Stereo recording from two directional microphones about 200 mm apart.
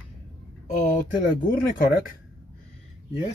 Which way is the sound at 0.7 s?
40° left (ahead or behind).